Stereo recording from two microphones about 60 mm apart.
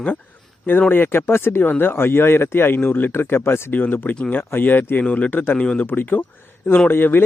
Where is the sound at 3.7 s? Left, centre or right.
Left.